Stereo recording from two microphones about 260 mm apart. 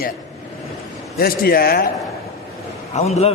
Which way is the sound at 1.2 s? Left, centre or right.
Left.